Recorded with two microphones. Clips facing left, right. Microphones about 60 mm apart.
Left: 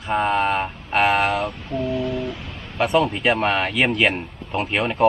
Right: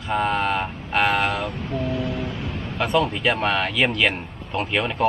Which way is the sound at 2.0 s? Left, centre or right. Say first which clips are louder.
Left 2 dB; centre.